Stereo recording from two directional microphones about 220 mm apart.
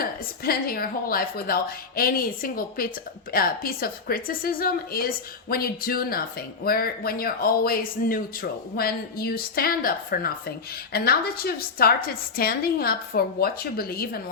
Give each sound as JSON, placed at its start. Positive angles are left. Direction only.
{"t": 0.0, "sound": "a woman's voice", "side_deg": 40}